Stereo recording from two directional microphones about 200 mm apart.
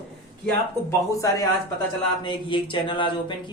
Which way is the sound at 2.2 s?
25° left (ahead or behind).